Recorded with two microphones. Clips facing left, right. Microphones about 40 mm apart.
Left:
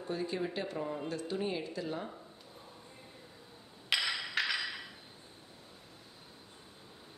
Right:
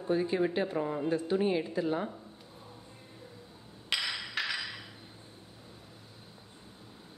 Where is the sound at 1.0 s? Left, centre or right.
Right.